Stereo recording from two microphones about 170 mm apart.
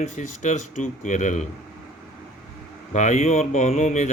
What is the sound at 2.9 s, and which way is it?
Speech, 45° left (ahead or behind).